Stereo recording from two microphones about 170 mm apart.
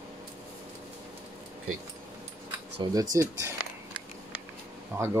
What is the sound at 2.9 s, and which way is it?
Speech, 20° right (ahead or behind).